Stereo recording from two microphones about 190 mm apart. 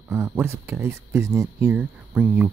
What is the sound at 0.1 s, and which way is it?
Speech, 10° right (ahead or behind).